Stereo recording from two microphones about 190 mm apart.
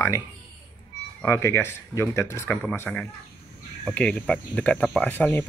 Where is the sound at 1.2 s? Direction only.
15° left (ahead or behind).